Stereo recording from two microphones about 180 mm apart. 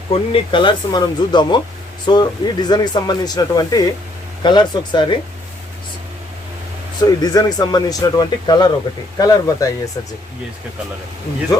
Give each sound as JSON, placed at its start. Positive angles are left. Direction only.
{"t": 0.1, "sound": "speech", "side_deg": 30}
{"t": 7.0, "sound": "speech", "side_deg": 20}